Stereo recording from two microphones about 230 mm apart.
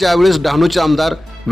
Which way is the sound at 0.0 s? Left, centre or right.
Centre.